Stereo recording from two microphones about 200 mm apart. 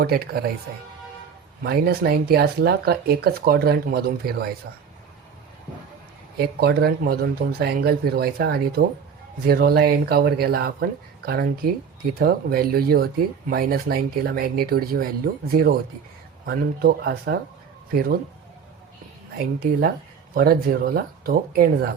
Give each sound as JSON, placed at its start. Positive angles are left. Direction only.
{"t": 0.0, "sound": "speech", "side_deg": -50}
{"t": 1.6, "sound": "speech", "side_deg": -50}
{"t": 6.3, "sound": "speech", "side_deg": -50}
{"t": 20.3, "sound": "speech", "side_deg": -50}